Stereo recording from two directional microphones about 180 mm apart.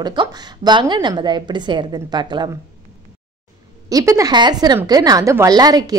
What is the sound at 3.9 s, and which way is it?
A woman's voice, 20° right (ahead or behind).